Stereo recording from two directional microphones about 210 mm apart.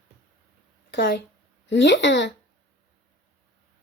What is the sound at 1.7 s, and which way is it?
Speech, 60° left (ahead or behind).